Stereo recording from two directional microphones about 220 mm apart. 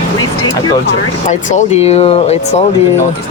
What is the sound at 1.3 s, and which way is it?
Speech, 35° left (ahead or behind).